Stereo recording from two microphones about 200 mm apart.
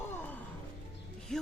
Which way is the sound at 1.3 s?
Centre (ahead or behind).